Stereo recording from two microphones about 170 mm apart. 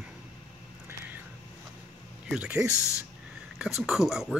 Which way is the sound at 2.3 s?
5° right (ahead or behind).